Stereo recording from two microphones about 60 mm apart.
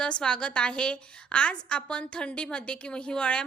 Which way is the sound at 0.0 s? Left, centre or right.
Centre.